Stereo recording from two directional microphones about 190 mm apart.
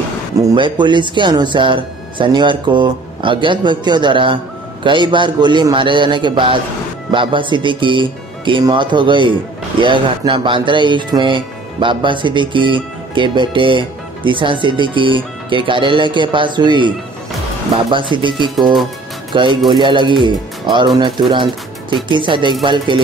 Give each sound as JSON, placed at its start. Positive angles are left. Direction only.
{"t": 0.5, "sound": "speech", "side_deg": -25}
{"t": 22.1, "sound": "speech", "side_deg": -25}